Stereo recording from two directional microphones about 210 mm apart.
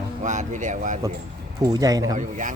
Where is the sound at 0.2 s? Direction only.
35° right (ahead or behind).